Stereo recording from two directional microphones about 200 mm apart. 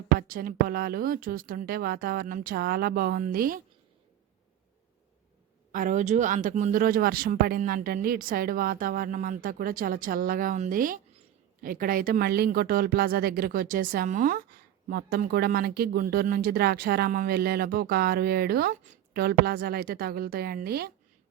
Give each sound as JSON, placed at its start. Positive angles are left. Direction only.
{"t": 0.2, "sound": "speech", "side_deg": -45}
{"t": 5.7, "sound": "speech", "side_deg": -40}